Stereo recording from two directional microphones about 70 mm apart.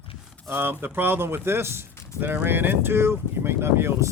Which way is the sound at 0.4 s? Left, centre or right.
Right.